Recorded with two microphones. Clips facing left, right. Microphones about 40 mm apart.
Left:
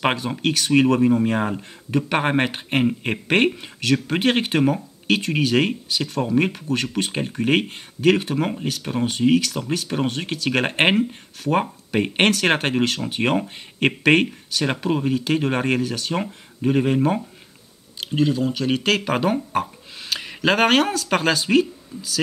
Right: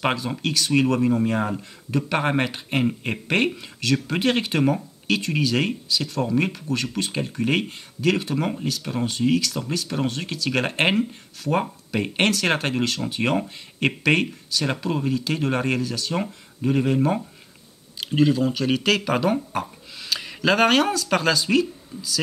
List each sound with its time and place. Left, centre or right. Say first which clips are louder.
0.0 s speech: left 3 dB; left
0.7 s speech: left 4 dB; centre
15.8 s speech: left 2 dB; left
16.1 s speech: left 1 dB; centre
18.0 s speech: right 1 dB; centre
18.9 s speech: left 1 dB; left
19.5 s speech: left 4 dB; left
20.1 s speech: left 1 dB; left